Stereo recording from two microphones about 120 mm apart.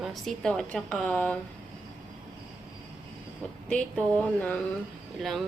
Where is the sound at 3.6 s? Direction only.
10° left (ahead or behind).